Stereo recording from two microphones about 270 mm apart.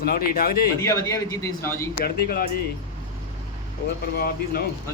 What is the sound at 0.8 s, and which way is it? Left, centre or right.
Speech, centre.